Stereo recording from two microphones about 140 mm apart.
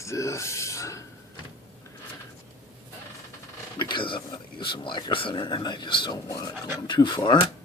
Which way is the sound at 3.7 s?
35° left (ahead or behind).